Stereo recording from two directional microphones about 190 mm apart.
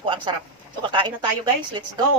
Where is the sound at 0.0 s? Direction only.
25° right (ahead or behind).